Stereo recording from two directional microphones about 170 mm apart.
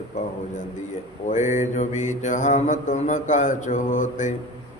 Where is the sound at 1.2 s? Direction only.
45° left (ahead or behind).